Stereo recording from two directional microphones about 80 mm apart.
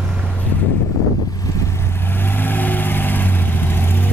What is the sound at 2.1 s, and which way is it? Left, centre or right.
Vehicle, left.